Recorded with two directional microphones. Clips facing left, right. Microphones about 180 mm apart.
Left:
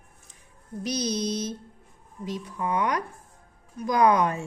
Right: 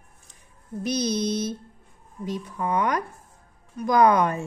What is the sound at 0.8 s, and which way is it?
Mantra, 55° right (ahead or behind).